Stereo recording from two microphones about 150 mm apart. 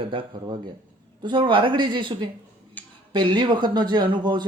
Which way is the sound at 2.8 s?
10° left (ahead or behind).